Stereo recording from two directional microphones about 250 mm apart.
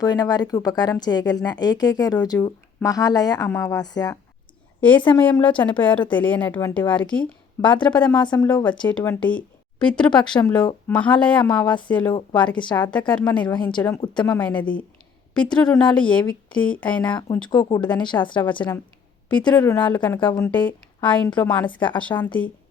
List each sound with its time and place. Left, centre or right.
0.0 s a woman's voice: centre
8.2 s speech: centre
8.9 s a woman's voice: centre
13.5 s a woman's voice: centre
17.2 s a woman's voice: centre
19.5 s a woman's voice: centre
21.8 s a woman's voice: centre
22.0 s a woman's voice: centre